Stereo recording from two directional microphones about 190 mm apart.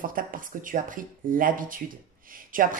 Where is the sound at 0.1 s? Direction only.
45° right (ahead or behind).